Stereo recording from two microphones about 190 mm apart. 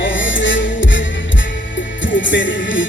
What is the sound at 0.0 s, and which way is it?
Music, 80° left.